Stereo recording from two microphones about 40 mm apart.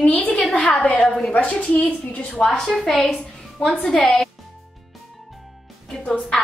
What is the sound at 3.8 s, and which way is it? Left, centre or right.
Speech, centre.